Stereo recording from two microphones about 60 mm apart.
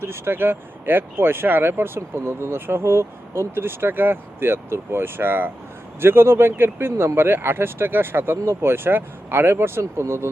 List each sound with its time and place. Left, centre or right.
0.0 s speech: right